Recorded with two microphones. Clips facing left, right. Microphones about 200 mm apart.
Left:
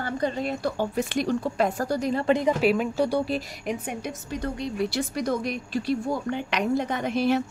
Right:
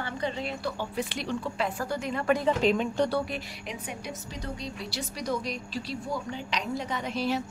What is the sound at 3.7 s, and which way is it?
A woman's voice, 50° left (ahead or behind).